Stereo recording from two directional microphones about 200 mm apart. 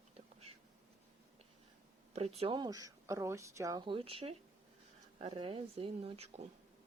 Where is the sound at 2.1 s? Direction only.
30° right (ahead or behind).